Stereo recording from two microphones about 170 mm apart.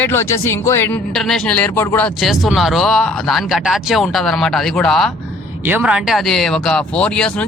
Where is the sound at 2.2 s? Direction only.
Centre (ahead or behind).